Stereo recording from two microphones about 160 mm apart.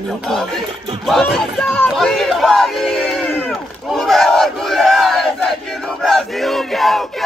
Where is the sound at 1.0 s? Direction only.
Centre (ahead or behind).